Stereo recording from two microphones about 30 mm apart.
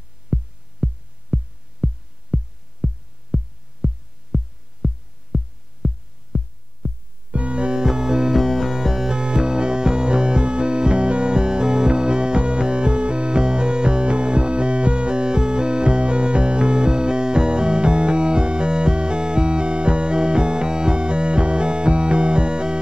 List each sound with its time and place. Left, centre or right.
0.3 s music: right
3.8 s heart sounds: right
4.3 s music: right
4.8 s heart sounds: right
6.3 s music: centre
6.8 s music: right
7.2 s keyboard: right
7.8 s music: right
8.4 s music: centre
9.1 s music: right